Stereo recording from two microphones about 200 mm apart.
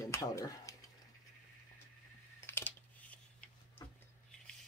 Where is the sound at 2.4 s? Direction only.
10° left (ahead or behind).